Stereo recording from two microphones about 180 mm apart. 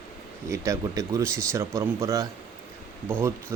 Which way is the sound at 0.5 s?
15° right (ahead or behind).